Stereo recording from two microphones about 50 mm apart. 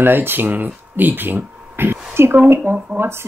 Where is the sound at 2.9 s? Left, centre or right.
Right.